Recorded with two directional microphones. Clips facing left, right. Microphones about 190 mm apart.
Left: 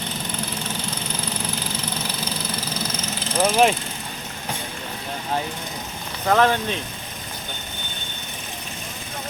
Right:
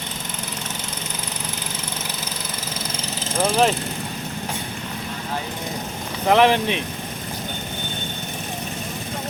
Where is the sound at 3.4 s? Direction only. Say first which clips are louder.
Left 1 dB; 5° left (ahead or behind).